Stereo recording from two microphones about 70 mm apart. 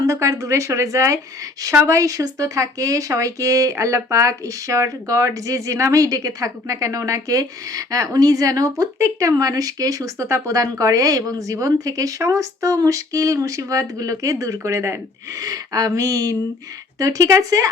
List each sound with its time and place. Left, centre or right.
0.0 s speech: right
15.4 s speech: right